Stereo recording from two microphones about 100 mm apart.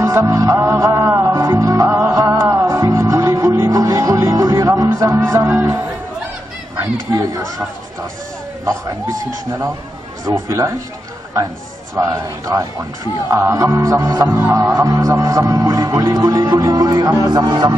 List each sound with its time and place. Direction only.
0.0 s music: 30° right (ahead or behind)
1.9 s music: 20° right (ahead or behind)
7.2 s speech: 35° right (ahead or behind)
9.2 s speech: 30° right (ahead or behind)
11.9 s speech: 30° right (ahead or behind); by 17.7 s 45° right (ahead or behind)